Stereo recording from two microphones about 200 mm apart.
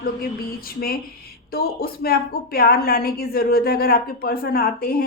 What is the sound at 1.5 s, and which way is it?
A woman's voice, 50° left (ahead or behind).